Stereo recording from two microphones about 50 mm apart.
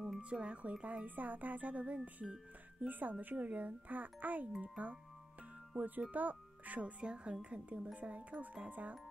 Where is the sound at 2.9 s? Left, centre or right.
Right.